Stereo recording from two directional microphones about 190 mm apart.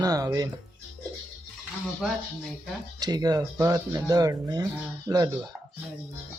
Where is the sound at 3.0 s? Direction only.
20° right (ahead or behind).